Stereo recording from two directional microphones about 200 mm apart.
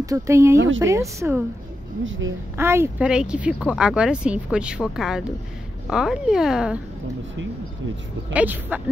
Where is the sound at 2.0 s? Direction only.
70° right (ahead or behind).